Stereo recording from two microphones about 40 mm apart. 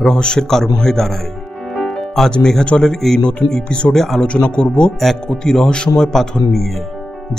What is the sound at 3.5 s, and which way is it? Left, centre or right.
Speech, left.